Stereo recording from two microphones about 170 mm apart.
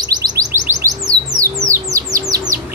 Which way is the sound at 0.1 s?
20° right (ahead or behind).